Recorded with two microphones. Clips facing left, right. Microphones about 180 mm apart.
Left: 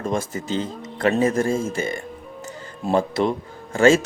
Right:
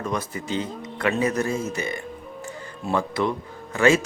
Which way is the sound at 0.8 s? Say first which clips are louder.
Left 5 dB; 40° left (ahead or behind).